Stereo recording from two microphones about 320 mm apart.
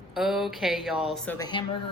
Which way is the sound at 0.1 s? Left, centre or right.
Centre.